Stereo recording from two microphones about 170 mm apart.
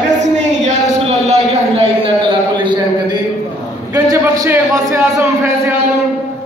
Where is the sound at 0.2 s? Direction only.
45° right (ahead or behind).